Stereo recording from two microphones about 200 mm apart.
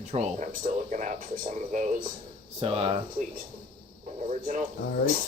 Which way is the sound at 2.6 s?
25° right (ahead or behind).